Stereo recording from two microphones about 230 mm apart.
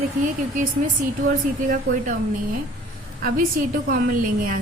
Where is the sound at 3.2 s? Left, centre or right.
Right.